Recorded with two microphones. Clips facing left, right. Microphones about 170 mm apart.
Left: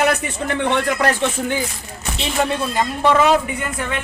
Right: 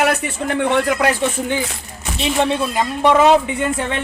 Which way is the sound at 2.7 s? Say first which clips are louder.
Right 2 dB; 15° right (ahead or behind).